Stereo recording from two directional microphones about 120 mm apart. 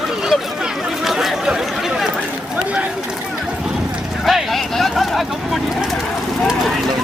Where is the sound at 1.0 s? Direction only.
Centre (ahead or behind).